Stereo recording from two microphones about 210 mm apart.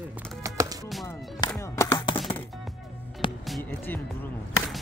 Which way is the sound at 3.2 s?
25° left (ahead or behind).